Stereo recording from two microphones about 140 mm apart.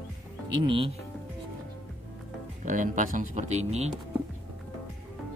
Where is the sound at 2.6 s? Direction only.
65° right (ahead or behind).